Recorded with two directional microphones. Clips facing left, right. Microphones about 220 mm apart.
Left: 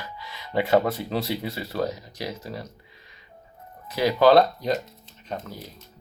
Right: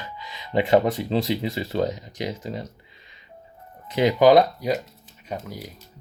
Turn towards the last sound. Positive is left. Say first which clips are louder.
# right 1 dB
turn(degrees=-10)  # may be behind; listen again after turning